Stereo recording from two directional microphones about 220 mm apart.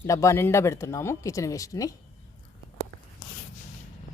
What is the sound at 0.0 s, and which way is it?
Speech, 15° left (ahead or behind).